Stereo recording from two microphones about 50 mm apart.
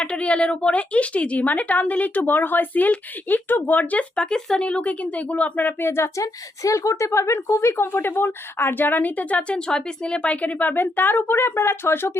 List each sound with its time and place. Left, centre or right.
0.0 s a woman's voice: left
4.1 s speech: centre; by 5.7 s left
5.8 s a woman's voice: left
7.9 s a woman's voice: left
9.5 s speech: centre
10.4 s a woman's voice: left
10.8 s speech: left